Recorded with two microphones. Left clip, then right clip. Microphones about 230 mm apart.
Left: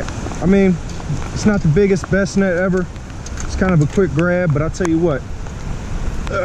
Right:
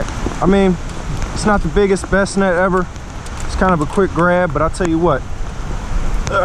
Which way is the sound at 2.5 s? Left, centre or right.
Right.